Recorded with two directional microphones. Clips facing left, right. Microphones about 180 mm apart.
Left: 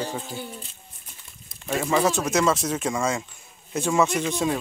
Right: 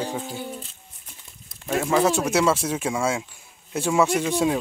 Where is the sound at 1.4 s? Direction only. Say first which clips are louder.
Right 2 dB; centre (ahead or behind).